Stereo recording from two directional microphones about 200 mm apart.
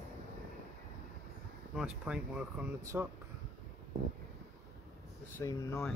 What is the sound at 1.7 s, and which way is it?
Speech, 5° right (ahead or behind).